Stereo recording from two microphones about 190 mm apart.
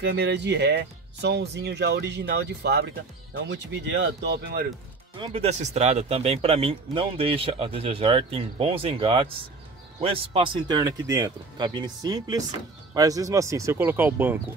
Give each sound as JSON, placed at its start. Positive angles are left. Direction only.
{"t": 0.0, "sound": "speech", "side_deg": -65}
{"t": 5.2, "sound": "speech", "side_deg": -30}